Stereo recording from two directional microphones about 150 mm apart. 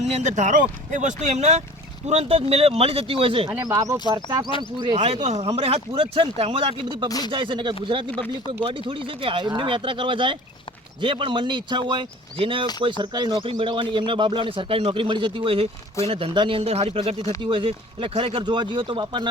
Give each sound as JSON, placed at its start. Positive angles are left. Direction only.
{"t": 0.0, "sound": "speech", "side_deg": -50}
{"t": 3.6, "sound": "speech", "side_deg": -20}
{"t": 4.4, "sound": "speech", "side_deg": 30}
{"t": 4.9, "sound": "speech", "side_deg": -50}